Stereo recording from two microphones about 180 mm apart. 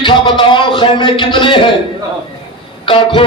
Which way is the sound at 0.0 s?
25° left (ahead or behind).